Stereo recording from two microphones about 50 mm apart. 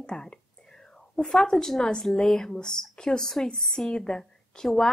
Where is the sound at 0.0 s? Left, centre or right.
Centre.